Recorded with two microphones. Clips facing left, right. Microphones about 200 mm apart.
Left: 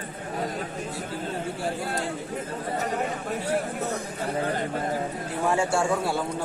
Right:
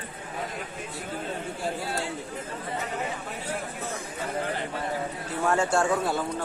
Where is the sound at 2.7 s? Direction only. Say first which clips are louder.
Left 4 dB; 40° left (ahead or behind).